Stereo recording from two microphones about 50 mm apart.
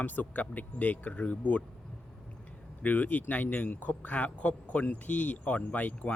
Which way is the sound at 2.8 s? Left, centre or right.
Left.